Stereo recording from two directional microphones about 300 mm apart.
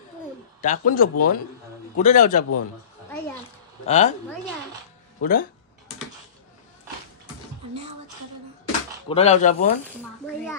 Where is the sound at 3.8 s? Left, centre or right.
Left.